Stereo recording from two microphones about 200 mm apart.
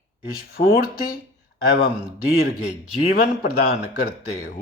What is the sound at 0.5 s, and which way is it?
Speech, 45° left (ahead or behind).